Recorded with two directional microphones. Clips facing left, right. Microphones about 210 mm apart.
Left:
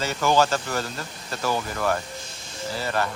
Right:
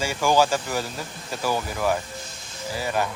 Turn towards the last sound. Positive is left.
turn(degrees=-10)  # may be behind; listen again after turning